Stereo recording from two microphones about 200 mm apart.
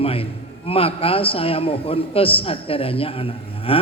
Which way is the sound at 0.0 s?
30° left (ahead or behind).